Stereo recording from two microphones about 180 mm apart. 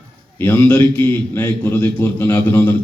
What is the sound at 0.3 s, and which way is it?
A man's voice, 10° left (ahead or behind).